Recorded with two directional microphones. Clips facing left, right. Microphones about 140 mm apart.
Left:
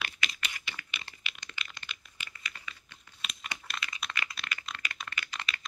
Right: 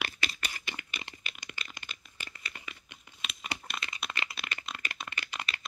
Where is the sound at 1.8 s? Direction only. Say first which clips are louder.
Even; 40° right (ahead or behind).